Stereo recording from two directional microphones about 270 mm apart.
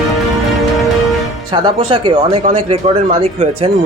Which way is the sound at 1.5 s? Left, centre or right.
Centre.